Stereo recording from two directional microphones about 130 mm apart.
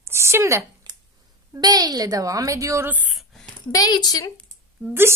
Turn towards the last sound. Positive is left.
turn(degrees=-10)  # may be behind; listen again after turning